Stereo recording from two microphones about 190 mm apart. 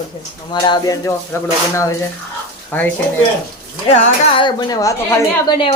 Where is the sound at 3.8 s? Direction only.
35° left (ahead or behind); by 5.5 s 15° left (ahead or behind).